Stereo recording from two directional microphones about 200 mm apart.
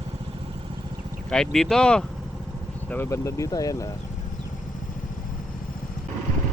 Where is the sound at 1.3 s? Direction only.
5° left (ahead or behind).